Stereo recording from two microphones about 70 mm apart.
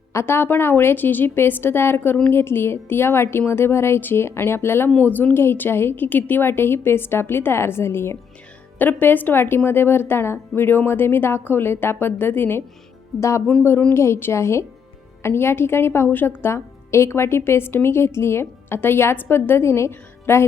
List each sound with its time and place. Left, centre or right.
0.1 s a woman's voice: left
8.8 s a woman's voice: left
13.1 s speech: left
13.5 s a woman's voice: left
13.9 s a woman's voice: left